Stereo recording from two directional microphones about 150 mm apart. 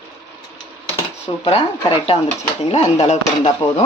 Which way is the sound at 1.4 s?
40° left (ahead or behind).